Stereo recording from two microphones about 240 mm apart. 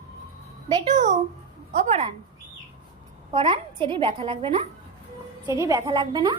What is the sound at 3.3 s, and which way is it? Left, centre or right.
A woman's voice, right.